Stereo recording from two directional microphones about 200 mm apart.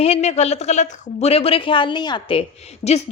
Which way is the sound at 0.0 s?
30° left (ahead or behind).